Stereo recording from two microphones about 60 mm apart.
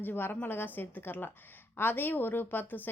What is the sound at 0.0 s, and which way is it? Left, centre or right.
Speech, left.